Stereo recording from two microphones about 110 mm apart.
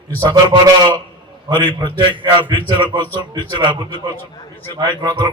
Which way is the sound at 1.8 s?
45° right (ahead or behind).